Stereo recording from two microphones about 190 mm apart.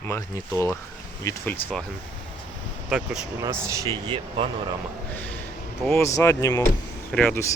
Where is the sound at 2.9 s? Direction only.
5° right (ahead or behind).